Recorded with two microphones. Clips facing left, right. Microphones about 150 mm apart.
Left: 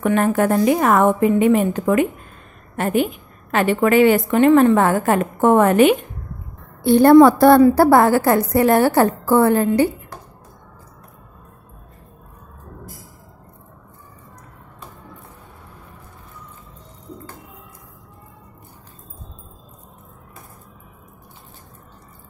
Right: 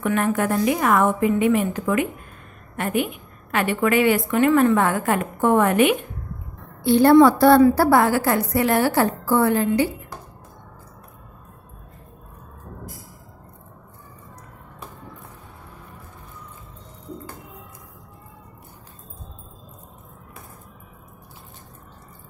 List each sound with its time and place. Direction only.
0.0 s a woman's voice: 40° left (ahead or behind)
6.8 s a woman's voice: 50° left (ahead or behind)